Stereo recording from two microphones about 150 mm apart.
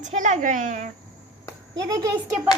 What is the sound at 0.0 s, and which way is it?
Speech, 55° right (ahead or behind).